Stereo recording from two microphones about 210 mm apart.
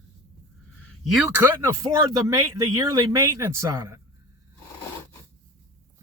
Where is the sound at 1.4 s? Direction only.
15° right (ahead or behind).